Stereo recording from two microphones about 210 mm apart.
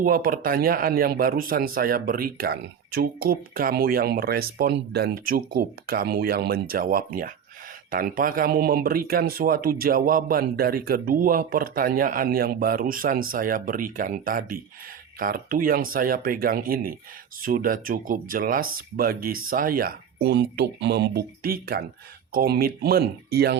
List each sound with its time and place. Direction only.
0.0 s a man's voice: 40° right (ahead or behind)